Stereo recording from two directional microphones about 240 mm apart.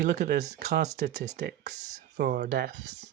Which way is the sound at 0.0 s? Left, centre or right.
Right.